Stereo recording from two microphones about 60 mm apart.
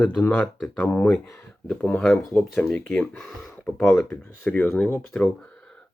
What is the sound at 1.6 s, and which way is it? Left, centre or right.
Speech, centre.